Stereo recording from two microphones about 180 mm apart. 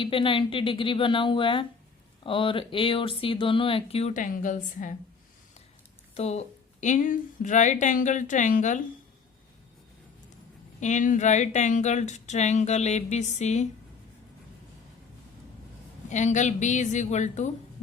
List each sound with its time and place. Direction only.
0.0 s speech: 30° left (ahead or behind); by 4.9 s 45° left (ahead or behind)
6.1 s a woman's voice: 35° left (ahead or behind)
10.8 s speech: 40° left (ahead or behind)
16.0 s speech: 40° left (ahead or behind)